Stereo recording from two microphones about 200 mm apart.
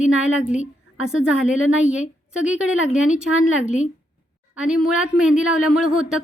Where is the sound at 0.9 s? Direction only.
90° left.